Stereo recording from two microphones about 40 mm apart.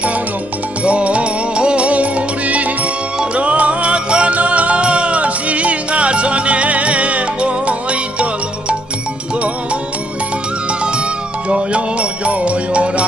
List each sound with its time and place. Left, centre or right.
0.8 s music: right
10.7 s music: right